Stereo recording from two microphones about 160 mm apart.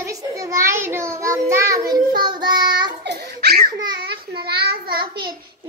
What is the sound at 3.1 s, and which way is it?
Laughter, 90° right.